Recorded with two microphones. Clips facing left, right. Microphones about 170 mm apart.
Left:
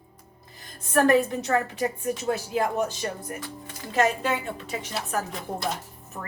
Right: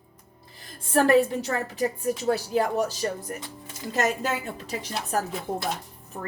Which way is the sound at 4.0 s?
40° right (ahead or behind).